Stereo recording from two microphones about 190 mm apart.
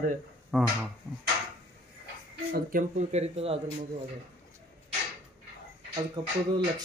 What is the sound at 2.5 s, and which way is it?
Speech, 45° right (ahead or behind).